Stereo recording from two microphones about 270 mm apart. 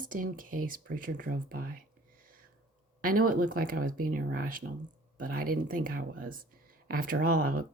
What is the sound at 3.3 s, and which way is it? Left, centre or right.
Speech, right.